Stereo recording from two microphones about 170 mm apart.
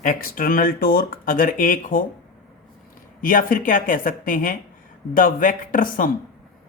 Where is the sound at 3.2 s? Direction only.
55° left (ahead or behind).